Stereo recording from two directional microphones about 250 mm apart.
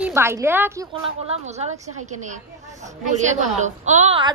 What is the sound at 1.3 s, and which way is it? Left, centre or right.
A woman's voice, right.